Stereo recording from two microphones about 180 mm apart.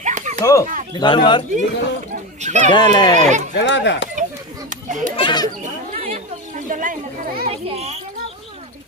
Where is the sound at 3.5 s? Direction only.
80° left.